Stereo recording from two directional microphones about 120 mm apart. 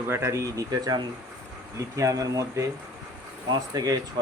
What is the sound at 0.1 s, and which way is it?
Speech, 20° right (ahead or behind).